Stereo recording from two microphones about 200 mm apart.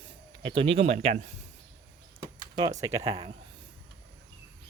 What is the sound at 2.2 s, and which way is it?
Door, 20° right (ahead or behind).